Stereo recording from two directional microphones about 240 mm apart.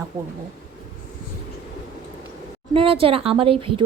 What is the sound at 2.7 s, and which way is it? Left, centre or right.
Speech, right.